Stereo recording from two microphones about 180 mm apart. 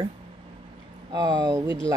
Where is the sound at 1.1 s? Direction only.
20° right (ahead or behind).